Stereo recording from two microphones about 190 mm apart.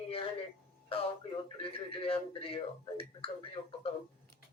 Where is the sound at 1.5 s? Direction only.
30° left (ahead or behind).